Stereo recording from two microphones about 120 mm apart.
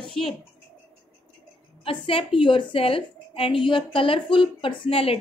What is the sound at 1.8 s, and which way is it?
A woman's voice, 45° left (ahead or behind).